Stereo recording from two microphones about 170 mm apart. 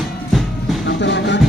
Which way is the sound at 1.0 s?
90° left.